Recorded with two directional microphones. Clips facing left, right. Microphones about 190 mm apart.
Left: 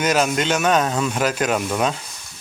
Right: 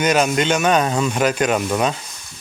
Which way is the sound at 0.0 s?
Centre (ahead or behind).